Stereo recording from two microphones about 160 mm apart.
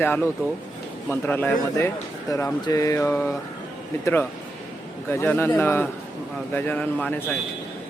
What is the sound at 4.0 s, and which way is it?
A man's voice, 15° left (ahead or behind).